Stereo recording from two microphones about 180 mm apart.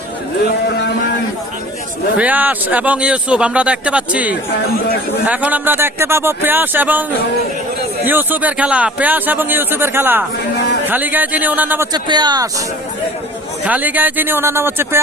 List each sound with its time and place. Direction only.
2.1 s a man's voice: 10° right (ahead or behind)
8.0 s a man's voice: 10° right (ahead or behind)
11.9 s speech: 25° right (ahead or behind)
13.7 s a man's voice: 10° right (ahead or behind)